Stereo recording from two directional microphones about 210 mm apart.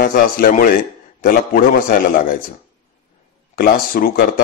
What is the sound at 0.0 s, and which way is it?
Speech, 45° left (ahead or behind).